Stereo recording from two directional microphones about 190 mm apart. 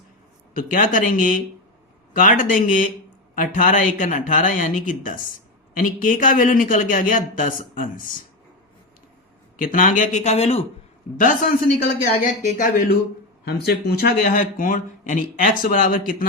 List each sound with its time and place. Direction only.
0.5 s a man's voice: 45° left (ahead or behind)
9.6 s speech: 45° left (ahead or behind)
11.8 s speech: 55° left (ahead or behind)
12.5 s a man's voice: 45° left (ahead or behind)
13.4 s a man's voice: 60° left (ahead or behind)